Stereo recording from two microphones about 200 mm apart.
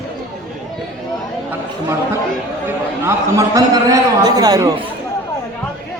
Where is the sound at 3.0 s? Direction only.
15° right (ahead or behind).